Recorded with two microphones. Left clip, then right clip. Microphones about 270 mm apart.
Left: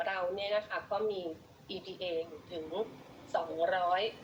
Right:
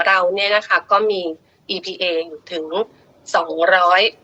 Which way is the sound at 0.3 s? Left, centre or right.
Right.